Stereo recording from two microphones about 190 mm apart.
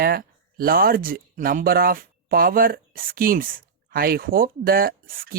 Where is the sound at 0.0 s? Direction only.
50° right (ahead or behind).